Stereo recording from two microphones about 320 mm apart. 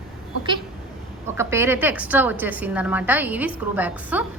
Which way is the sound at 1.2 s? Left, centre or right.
Centre.